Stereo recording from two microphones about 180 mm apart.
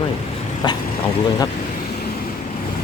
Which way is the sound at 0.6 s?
25° left (ahead or behind).